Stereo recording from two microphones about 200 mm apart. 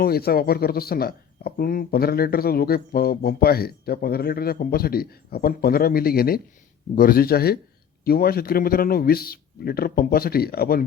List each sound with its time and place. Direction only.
0.0 s speech: 50° left (ahead or behind)